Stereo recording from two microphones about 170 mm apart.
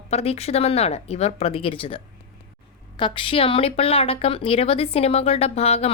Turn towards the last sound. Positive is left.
turn(degrees=35)  # may be behind; listen again after turning